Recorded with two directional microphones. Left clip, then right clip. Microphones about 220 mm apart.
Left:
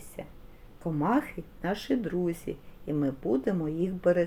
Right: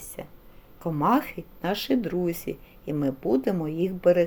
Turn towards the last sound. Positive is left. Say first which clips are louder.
# right 5 dB
turn(degrees=-15)  # may be behind; listen again after turning